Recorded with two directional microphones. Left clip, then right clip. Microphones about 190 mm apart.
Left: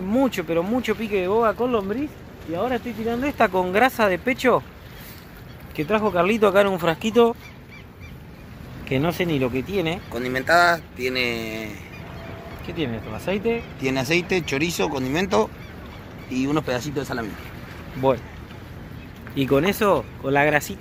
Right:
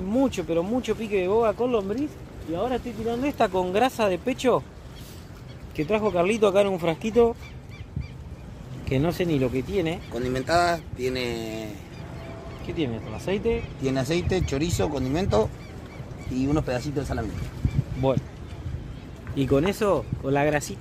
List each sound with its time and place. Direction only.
0.1 s speech: 10° left (ahead or behind)
5.8 s speech: 5° left (ahead or behind)
8.8 s speech: centre (ahead or behind)
10.1 s speech: 10° right (ahead or behind)
12.6 s speech: 10° left (ahead or behind)
13.8 s speech: 25° right (ahead or behind)
18.0 s speech: 15° left (ahead or behind)
19.3 s speech: 10° left (ahead or behind)